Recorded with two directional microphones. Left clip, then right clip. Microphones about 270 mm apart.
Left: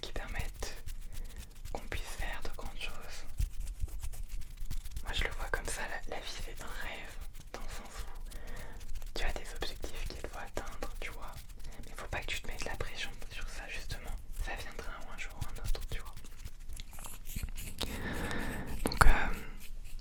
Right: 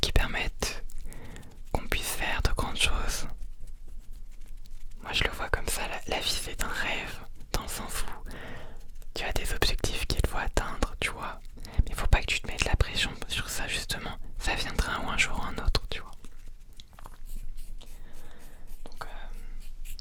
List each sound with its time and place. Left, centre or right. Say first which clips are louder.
0.0 s whispering: right 14 dB; right
1.7 s whispering: right 11 dB; right
2.6 s whispering: right 15 dB; right
5.0 s whispering: right 9 dB; right
6.1 s whispering: right 12 dB; right
17.7 s whispering: left 16 dB; left